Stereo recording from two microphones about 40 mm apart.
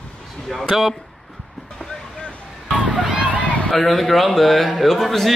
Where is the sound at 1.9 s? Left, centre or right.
Centre.